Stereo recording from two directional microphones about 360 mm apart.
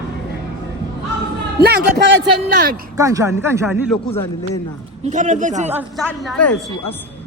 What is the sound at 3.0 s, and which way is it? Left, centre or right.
Speech, centre.